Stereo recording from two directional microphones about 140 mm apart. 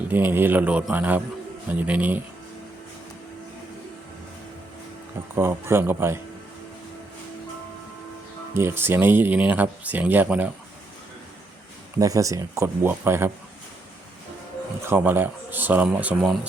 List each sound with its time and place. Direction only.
0.1 s speech: 15° right (ahead or behind)
5.3 s speech: 15° right (ahead or behind)
8.5 s speech: 15° right (ahead or behind)
11.9 s speech: 25° right (ahead or behind)
14.8 s speech: 15° right (ahead or behind)